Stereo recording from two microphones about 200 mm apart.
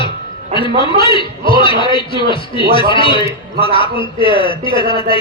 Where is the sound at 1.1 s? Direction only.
25° left (ahead or behind).